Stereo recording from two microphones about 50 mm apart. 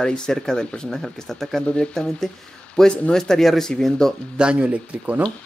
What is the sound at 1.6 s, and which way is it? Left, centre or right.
Speech, left.